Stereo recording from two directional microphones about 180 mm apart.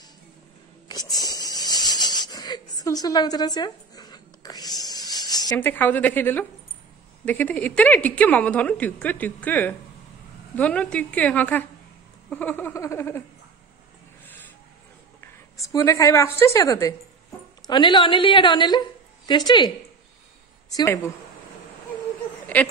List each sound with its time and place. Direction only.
0.8 s wheeze: 20° left (ahead or behind)
5.6 s a woman's voice: 10° left (ahead or behind)
15.1 s a woman's voice: 15° left (ahead or behind)
20.7 s a woman's voice: 20° left (ahead or behind)